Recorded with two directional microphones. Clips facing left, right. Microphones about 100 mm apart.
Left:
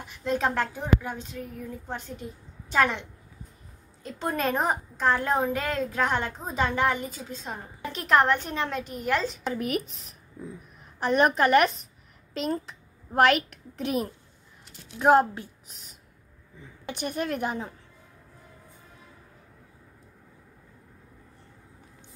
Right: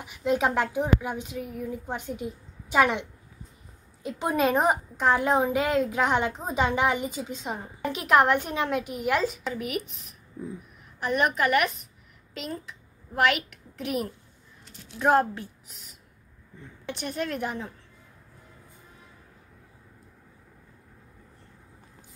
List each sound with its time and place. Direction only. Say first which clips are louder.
0.0 s a woman's voice: right 2 dB; 10° right (ahead or behind)
9.5 s a woman's voice: left 2 dB; 40° left (ahead or behind)
9.9 s speech: right 3 dB; centre (ahead or behind)
11.0 s a woman's voice: left 3 dB; 35° left (ahead or behind)
15.0 s speech: left 2 dB; 20° left (ahead or behind)
16.8 s a woman's voice: left 1 dB; 15° left (ahead or behind)